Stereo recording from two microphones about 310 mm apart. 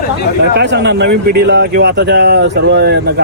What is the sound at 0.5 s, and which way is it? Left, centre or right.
Speech, right.